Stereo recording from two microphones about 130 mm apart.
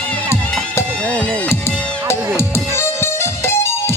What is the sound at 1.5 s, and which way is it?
Music, 20° left (ahead or behind).